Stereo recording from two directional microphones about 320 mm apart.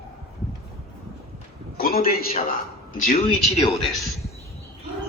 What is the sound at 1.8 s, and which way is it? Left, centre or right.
A man's voice, left.